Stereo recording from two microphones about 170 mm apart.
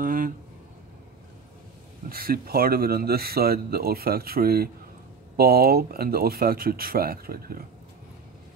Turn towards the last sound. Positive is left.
turn(degrees=-60)  # may be behind; listen again after turning